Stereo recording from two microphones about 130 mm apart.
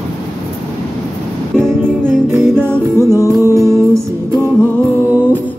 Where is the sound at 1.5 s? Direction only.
15° right (ahead or behind).